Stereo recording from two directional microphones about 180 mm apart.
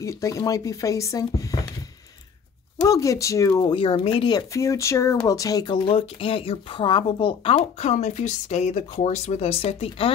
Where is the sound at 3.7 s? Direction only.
30° left (ahead or behind).